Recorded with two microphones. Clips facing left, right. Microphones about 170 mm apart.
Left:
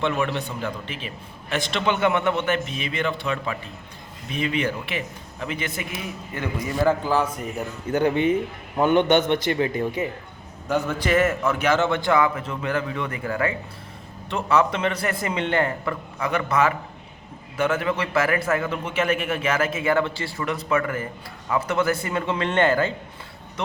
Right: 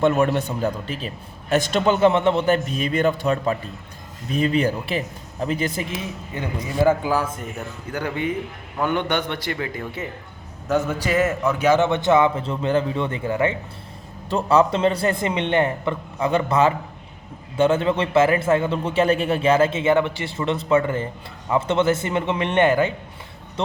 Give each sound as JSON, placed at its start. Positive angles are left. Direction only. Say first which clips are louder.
{"t": 0.0, "sound": "a man's voice", "louder": "right 6 dB", "side_deg": -45}
{"t": 6.3, "sound": "a man's voice", "louder": "right 1 dB", "side_deg": -15}
{"t": 7.9, "sound": "a man's voice", "louder": "left 5 dB", "side_deg": 25}
{"t": 10.7, "sound": "a man's voice", "louder": "right 2 dB", "side_deg": 0}
{"t": 11.1, "sound": "a man's voice", "louder": "even", "side_deg": -15}
{"t": 23.6, "sound": "speech", "louder": "right 4 dB", "side_deg": -30}